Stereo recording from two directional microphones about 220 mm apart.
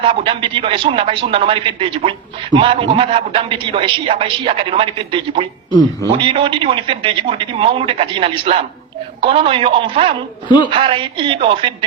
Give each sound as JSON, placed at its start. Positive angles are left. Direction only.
{"t": 0.0, "sound": "speech", "side_deg": -25}